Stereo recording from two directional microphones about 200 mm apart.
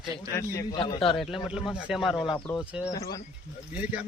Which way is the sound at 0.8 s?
25° left (ahead or behind).